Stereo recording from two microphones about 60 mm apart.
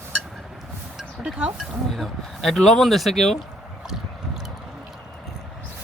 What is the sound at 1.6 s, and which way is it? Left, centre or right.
Speech, centre.